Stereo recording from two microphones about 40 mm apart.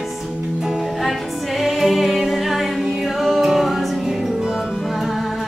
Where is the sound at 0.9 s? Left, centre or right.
Centre.